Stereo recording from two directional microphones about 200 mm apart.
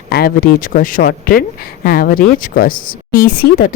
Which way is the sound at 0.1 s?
50° left (ahead or behind).